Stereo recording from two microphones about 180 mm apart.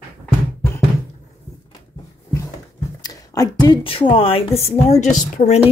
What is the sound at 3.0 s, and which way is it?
Speech, 20° left (ahead or behind).